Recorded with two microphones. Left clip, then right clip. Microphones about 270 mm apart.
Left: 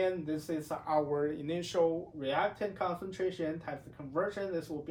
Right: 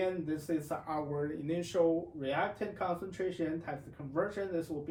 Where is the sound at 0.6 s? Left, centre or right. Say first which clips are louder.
Left 5 dB; centre.